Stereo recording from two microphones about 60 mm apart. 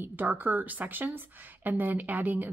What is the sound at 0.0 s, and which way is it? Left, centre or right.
Speech, right.